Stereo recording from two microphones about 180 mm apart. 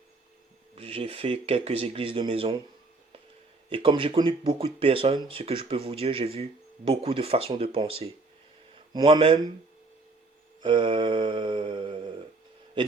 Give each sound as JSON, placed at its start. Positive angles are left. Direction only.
{"t": 0.8, "sound": "speech", "side_deg": -35}
{"t": 3.7, "sound": "speech", "side_deg": -30}
{"t": 10.6, "sound": "mantra", "side_deg": -25}